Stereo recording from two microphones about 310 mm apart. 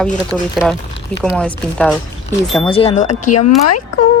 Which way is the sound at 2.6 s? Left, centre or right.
Centre.